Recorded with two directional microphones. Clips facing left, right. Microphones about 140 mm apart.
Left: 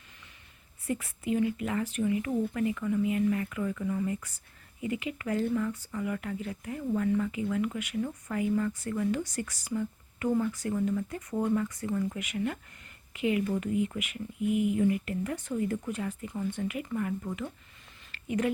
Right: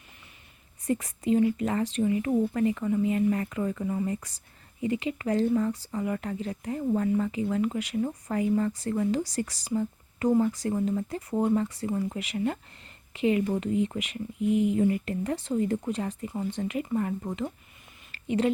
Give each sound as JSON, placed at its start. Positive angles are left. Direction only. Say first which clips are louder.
{"t": 0.9, "sound": "speech", "louder": "right 5 dB", "side_deg": -35}
{"t": 18.3, "sound": "speech", "louder": "right 4 dB", "side_deg": -25}